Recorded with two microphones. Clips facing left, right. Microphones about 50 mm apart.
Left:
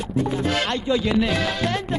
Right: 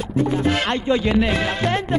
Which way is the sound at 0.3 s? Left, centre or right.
Centre.